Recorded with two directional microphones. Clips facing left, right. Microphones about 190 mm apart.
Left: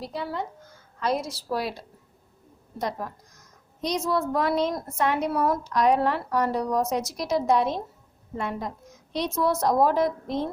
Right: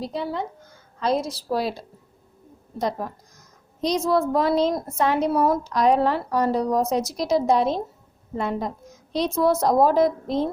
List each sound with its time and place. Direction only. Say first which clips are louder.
0.0 s a woman's voice: right 4 dB; 20° right (ahead or behind)
2.7 s a woman's voice: right 4 dB; 30° right (ahead or behind)